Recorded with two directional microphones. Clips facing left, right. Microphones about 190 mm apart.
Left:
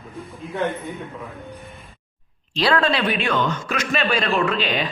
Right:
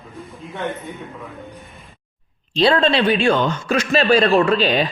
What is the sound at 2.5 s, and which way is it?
A man's voice, 25° right (ahead or behind).